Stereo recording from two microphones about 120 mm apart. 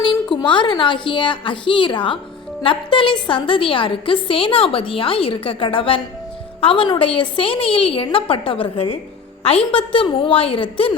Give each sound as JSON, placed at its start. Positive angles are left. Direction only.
{"t": 0.0, "sound": "a woman's voice", "side_deg": 40}